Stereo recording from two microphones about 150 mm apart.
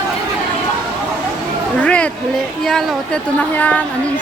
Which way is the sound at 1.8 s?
10° left (ahead or behind).